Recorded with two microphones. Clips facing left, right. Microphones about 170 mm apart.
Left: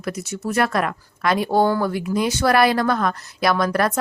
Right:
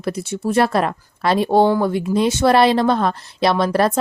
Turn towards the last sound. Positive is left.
turn(degrees=-30)  # may be behind; listen again after turning